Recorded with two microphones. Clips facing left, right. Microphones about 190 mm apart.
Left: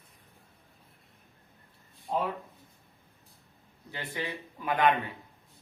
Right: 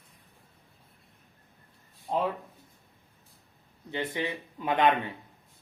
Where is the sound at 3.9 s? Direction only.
20° right (ahead or behind).